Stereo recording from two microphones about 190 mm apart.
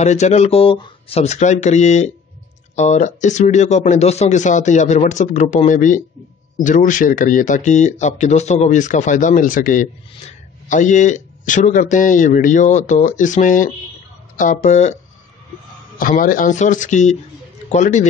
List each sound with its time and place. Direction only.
0.0 s speech: 35° left (ahead or behind)
16.0 s speech: 45° left (ahead or behind)